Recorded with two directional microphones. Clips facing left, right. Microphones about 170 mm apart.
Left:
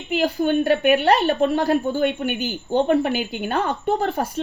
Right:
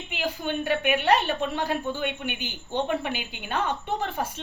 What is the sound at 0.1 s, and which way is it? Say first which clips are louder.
A woman's voice: left 10 dB; 40° left (ahead or behind).